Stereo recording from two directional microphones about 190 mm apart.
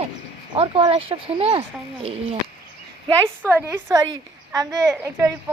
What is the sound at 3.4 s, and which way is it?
A woman's voice, 10° right (ahead or behind).